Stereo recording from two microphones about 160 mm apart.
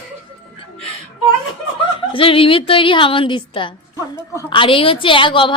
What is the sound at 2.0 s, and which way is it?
A woman's voice, 35° left (ahead or behind).